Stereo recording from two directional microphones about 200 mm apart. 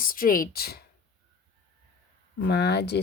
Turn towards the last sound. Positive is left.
turn(degrees=55)  # may be behind; listen again after turning